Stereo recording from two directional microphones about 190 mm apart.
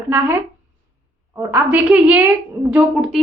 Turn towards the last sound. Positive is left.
turn(degrees=-5)  # may be behind; listen again after turning